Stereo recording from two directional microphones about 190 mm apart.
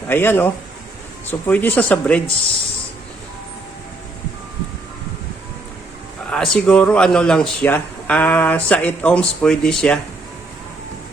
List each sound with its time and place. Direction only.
0.1 s speech: 10° left (ahead or behind)
6.3 s speech: 5° left (ahead or behind)